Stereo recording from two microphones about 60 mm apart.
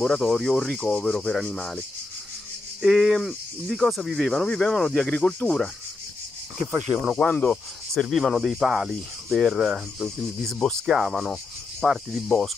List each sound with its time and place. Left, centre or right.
0.0 s cricket: centre
2.8 s speech: centre
4.5 s cricket: centre
5.0 s speech: left
6.9 s speech: right
7.2 s cricket: centre
7.9 s speech: centre
8.2 s speech: centre
10.0 s cricket: centre
10.9 s speech: centre